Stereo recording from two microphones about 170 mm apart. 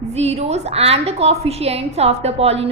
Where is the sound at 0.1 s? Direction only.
40° right (ahead or behind).